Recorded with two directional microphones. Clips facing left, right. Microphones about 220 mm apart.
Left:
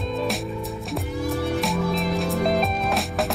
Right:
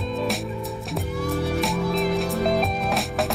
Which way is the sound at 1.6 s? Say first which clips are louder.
Right 1 dB; centre (ahead or behind).